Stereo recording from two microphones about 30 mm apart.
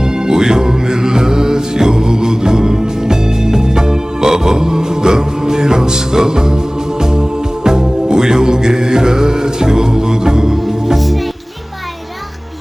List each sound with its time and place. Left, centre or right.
0.0 s music: right
10.9 s music: centre